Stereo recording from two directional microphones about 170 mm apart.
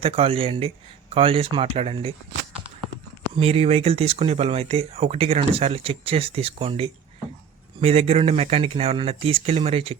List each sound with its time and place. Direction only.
0.0 s speech: 35° right (ahead or behind)